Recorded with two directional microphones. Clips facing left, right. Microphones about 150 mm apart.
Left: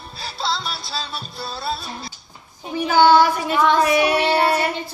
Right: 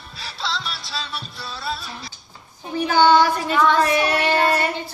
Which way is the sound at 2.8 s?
5° left (ahead or behind).